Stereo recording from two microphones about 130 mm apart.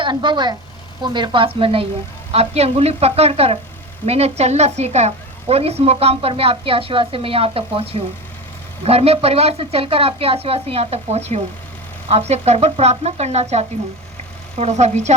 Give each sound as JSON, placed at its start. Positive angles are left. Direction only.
{"t": 0.0, "sound": "a woman's voice", "side_deg": -35}